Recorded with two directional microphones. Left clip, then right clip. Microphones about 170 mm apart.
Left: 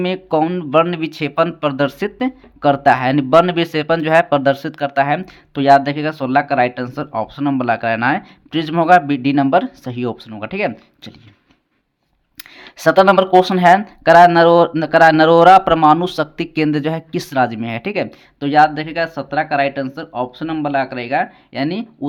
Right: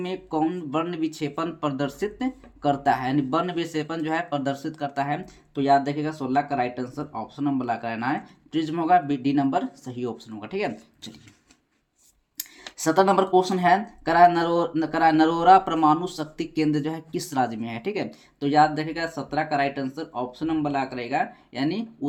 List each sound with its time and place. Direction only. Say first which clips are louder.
0.0 s speech: left 9 dB; 40° left (ahead or behind)
12.4 s speech: left 9 dB; 35° left (ahead or behind)